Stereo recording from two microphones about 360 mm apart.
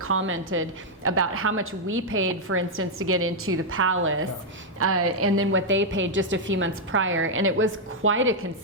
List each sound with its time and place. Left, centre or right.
0.0 s a woman's voice: right